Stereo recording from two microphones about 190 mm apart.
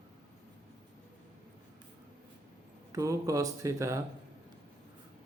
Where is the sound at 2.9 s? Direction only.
15° right (ahead or behind).